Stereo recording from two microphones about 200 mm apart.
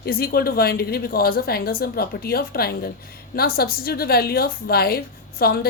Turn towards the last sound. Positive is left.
turn(degrees=50)  # may be behind; listen again after turning